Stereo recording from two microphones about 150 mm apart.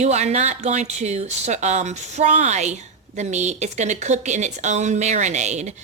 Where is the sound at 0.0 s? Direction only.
45° right (ahead or behind).